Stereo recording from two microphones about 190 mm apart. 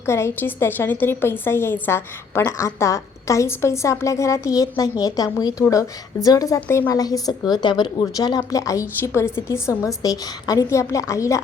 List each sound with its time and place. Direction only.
0.0 s a woman's voice: 15° left (ahead or behind)